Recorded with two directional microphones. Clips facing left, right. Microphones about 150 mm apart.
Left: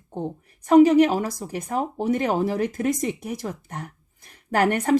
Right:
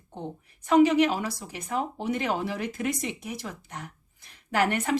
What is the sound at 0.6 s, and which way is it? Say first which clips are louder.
Speech: left 5 dB; 45° left (ahead or behind).